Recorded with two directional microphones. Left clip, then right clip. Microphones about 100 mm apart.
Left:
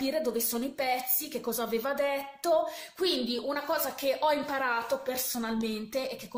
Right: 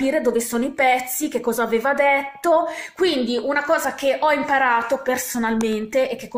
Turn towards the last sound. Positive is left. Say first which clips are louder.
# right 13 dB
turn(degrees=5)  # may be behind; listen again after turning